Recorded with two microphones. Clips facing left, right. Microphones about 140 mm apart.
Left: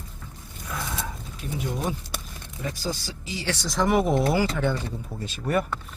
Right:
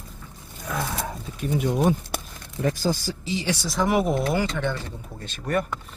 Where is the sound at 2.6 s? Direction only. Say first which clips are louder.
Right 7 dB; 50° right (ahead or behind).